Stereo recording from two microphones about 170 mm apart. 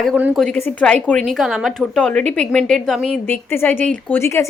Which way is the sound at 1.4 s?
5° right (ahead or behind).